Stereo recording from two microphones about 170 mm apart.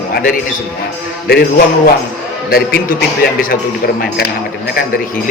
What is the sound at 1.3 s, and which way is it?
Speech, 65° left (ahead or behind).